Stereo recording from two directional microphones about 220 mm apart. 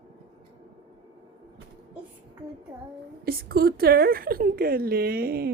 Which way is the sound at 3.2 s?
45° right (ahead or behind).